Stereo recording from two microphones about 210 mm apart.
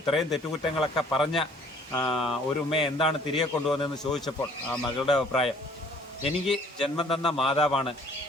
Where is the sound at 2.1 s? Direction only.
Centre (ahead or behind).